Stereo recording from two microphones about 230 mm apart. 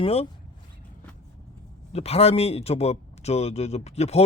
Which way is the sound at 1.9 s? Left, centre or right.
Left.